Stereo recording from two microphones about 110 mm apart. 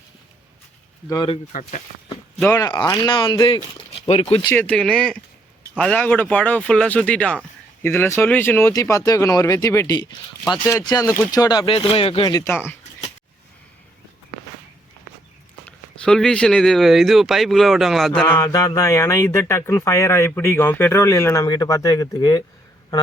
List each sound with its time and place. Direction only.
2.5 s speech: 30° left (ahead or behind)
2.9 s speech: 45° left (ahead or behind); by 4.4 s 60° left (ahead or behind)
4.5 s speech: 10° left (ahead or behind)
8.7 s speech: 30° left (ahead or behind)
10.6 s speech: 25° left (ahead or behind)
10.8 s speech: 35° left (ahead or behind)
11.7 s speech: 55° left (ahead or behind)
12.4 s speech: 20° left (ahead or behind)
15.6 s speech: 5° left (ahead or behind)
18.3 s speech: 30° left (ahead or behind)
21.4 s speech: 35° left (ahead or behind)